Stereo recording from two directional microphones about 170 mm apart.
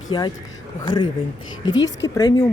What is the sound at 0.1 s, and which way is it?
Speech, 30° left (ahead or behind).